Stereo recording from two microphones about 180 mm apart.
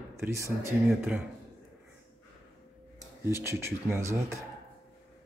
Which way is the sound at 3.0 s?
15° right (ahead or behind).